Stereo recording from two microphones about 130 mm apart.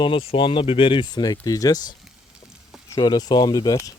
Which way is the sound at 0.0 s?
45° left (ahead or behind).